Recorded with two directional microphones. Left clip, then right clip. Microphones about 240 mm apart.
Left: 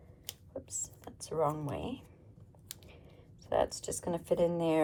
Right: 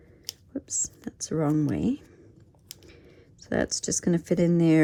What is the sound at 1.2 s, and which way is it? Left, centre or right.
Speech, right.